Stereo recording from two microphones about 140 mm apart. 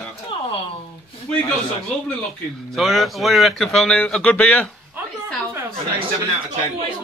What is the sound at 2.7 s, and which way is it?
A man's voice, centre (ahead or behind).